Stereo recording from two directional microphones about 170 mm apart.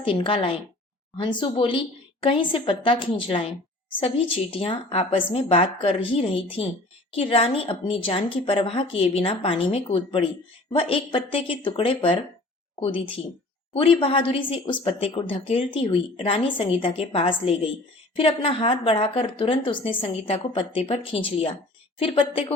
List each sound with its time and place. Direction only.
0.0 s a woman's voice: 30° left (ahead or behind)